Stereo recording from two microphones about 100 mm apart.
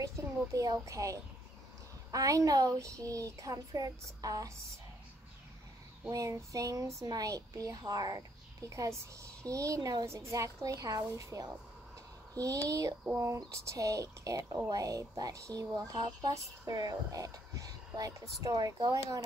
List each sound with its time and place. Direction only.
0.0 s speech: 35° right (ahead or behind)
6.0 s speech: 35° right (ahead or behind)